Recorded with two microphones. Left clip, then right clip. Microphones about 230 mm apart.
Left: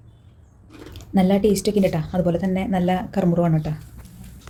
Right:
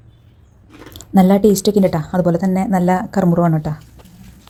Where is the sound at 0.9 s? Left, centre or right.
Right.